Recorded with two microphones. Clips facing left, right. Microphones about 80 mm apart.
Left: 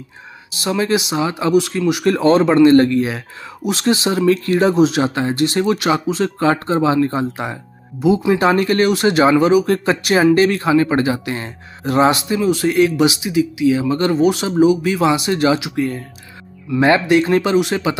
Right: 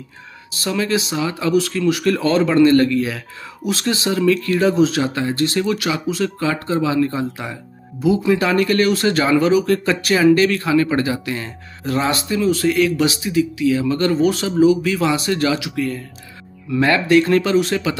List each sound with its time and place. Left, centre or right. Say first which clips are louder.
0.6 s speech: left 2 dB; left